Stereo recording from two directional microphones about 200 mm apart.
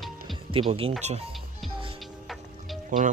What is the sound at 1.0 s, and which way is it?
Speech, 35° right (ahead or behind).